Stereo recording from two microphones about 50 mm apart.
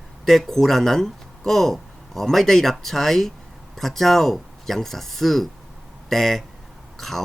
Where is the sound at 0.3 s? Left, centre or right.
Centre.